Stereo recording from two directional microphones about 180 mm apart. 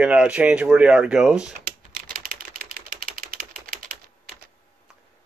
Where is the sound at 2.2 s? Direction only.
55° right (ahead or behind).